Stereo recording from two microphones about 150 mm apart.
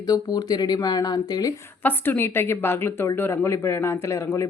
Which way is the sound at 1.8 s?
15° left (ahead or behind).